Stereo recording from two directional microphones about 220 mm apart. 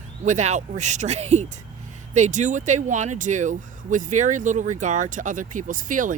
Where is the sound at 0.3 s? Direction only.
30° right (ahead or behind).